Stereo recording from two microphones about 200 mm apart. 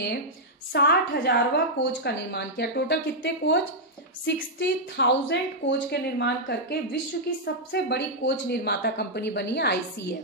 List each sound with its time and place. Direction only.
0.7 s a woman's voice: 55° left (ahead or behind)